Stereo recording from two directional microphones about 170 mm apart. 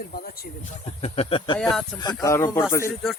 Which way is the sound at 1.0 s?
35° left (ahead or behind).